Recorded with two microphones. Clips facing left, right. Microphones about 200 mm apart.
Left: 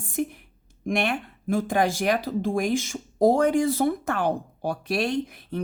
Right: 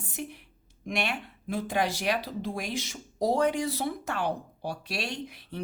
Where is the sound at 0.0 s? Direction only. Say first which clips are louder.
Left 10 dB; 50° left (ahead or behind).